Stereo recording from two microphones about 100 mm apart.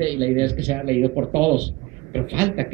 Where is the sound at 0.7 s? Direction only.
20° right (ahead or behind).